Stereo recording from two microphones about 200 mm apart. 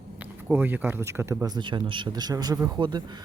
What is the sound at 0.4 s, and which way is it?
Speech, 10° right (ahead or behind).